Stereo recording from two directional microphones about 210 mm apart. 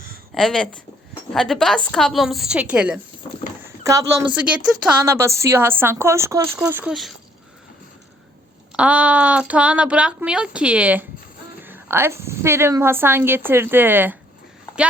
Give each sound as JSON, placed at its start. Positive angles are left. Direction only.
{"t": 0.3, "sound": "speech", "side_deg": 5}
{"t": 3.8, "sound": "a woman's voice", "side_deg": -15}
{"t": 8.7, "sound": "a woman's voice", "side_deg": -5}